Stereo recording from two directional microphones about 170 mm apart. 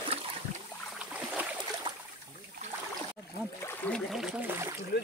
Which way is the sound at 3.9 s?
10° left (ahead or behind).